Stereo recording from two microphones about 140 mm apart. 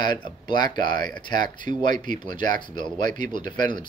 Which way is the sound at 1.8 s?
70° right (ahead or behind).